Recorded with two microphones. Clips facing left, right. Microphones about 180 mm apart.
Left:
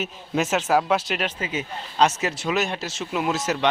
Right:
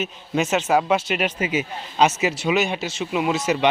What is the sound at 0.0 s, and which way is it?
Speech, centre (ahead or behind).